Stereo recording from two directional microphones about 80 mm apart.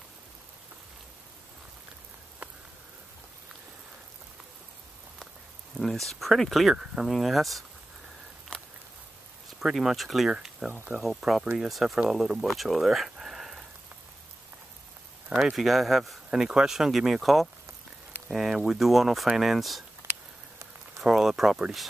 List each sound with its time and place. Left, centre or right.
2.4 s a sound: centre
5.8 s speech: centre
8.5 s a sound: centre
9.6 s speech: centre
15.5 s speech: centre
21.0 s speech: centre